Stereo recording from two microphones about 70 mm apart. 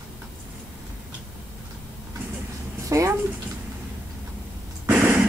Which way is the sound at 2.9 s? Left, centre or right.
Right.